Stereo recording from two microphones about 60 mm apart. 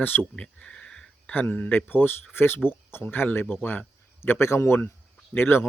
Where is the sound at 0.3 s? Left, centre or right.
Centre.